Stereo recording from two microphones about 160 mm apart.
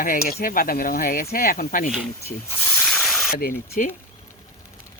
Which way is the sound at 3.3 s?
65° left (ahead or behind).